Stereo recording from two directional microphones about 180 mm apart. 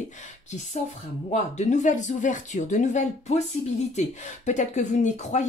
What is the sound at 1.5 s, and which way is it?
Speech, 40° left (ahead or behind).